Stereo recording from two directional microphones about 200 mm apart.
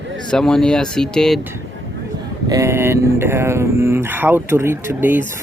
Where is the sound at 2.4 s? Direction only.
15° right (ahead or behind).